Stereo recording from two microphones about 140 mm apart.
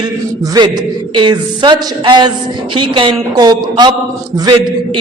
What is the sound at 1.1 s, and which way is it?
A man's voice, 35° right (ahead or behind).